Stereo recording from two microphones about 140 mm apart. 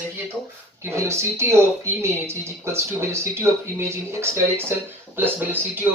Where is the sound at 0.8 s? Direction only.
20° right (ahead or behind).